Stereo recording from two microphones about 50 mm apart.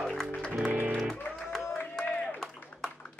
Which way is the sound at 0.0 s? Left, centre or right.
Centre.